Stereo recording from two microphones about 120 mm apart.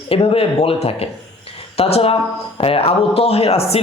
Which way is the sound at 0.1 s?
50° left (ahead or behind).